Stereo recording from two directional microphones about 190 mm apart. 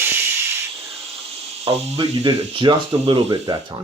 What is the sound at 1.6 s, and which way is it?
Speech, 25° right (ahead or behind).